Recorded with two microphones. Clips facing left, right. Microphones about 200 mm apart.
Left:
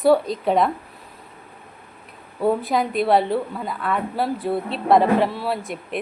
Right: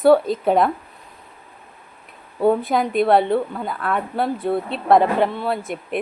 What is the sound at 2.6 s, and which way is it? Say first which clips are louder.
A woman's voice: right 2 dB; centre (ahead or behind).